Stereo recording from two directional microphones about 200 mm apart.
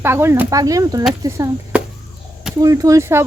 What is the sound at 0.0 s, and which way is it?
Speech, 10° right (ahead or behind).